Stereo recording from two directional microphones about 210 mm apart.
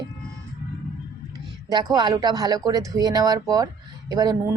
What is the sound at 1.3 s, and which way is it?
Speech, 20° right (ahead or behind).